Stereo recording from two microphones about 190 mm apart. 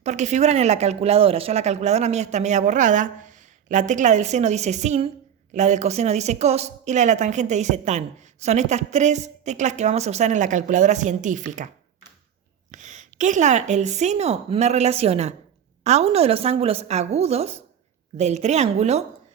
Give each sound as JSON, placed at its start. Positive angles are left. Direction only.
{"t": 0.0, "sound": "a woman's voice", "side_deg": -40}
{"t": 12.7, "sound": "a woman's voice", "side_deg": -40}